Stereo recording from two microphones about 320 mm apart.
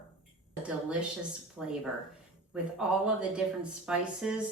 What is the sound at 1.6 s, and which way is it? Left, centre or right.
Speech, centre.